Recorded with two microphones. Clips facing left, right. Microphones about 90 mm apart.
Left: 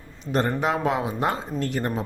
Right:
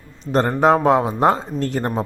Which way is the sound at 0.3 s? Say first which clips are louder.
Right 8 dB; 35° right (ahead or behind).